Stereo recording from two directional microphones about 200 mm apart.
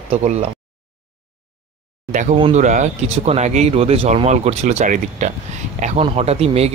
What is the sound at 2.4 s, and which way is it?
Speech, 30° right (ahead or behind).